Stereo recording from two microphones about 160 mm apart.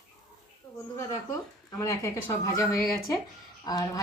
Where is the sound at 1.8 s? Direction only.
20° left (ahead or behind).